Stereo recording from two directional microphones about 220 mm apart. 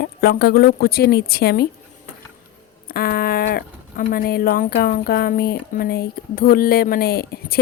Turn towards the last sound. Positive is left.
turn(degrees=45)  # may be behind; listen again after turning